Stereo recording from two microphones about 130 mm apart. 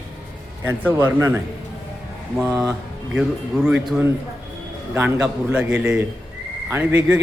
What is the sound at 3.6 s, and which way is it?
Speech, 5° right (ahead or behind).